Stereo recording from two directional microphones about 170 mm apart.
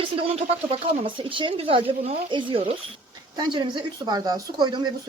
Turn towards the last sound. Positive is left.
turn(degrees=-25)  # may be behind; listen again after turning